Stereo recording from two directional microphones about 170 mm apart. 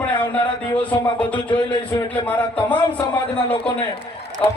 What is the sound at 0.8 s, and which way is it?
Speech, 10° left (ahead or behind).